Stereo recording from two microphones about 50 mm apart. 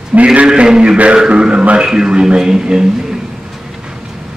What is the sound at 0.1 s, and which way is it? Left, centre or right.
Speech, right.